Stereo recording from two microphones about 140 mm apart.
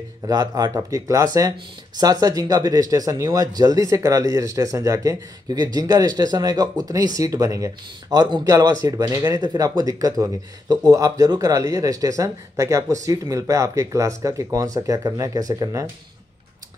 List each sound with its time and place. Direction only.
0.3 s speech: 30° right (ahead or behind)